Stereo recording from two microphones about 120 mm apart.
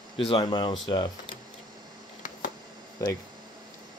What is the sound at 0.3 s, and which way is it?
Speech, 40° left (ahead or behind).